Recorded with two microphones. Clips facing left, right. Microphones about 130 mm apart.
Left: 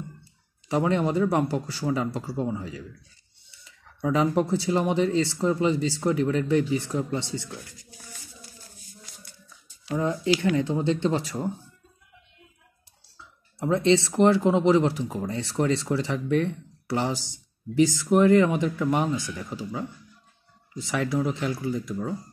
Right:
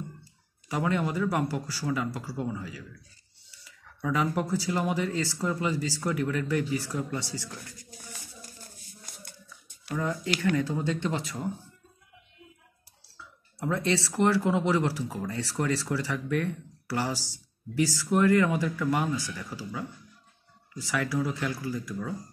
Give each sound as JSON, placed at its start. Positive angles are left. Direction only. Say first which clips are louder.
{"t": 0.7, "sound": "speech", "louder": "left 5 dB", "side_deg": 30}
{"t": 9.9, "sound": "speech", "louder": "left 6 dB", "side_deg": 25}
{"t": 13.6, "sound": "speech", "louder": "left 7 dB", "side_deg": 25}